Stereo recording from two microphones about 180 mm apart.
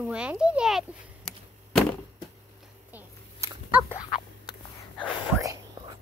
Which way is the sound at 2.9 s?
15° right (ahead or behind).